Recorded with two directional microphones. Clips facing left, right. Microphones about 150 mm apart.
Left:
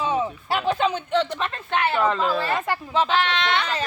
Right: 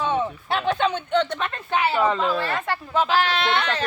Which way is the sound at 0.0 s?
5° left (ahead or behind).